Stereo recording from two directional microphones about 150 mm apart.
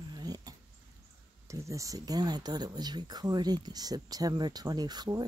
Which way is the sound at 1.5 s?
20° right (ahead or behind).